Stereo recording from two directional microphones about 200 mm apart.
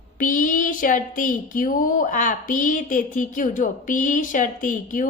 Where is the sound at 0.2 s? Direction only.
40° left (ahead or behind).